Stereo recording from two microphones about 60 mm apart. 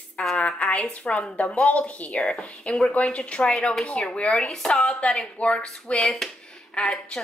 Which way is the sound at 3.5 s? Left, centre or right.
Centre.